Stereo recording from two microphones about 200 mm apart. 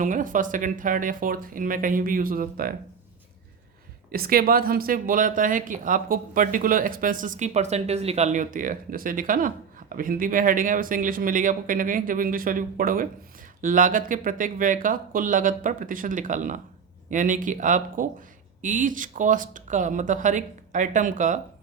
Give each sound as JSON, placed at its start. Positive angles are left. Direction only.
{"t": 0.0, "sound": "speech", "side_deg": -40}
{"t": 4.1, "sound": "speech", "side_deg": -50}